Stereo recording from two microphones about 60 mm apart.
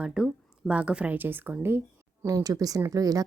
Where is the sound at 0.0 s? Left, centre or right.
Centre.